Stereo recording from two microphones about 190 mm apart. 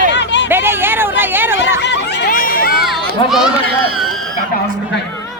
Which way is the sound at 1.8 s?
65° left (ahead or behind).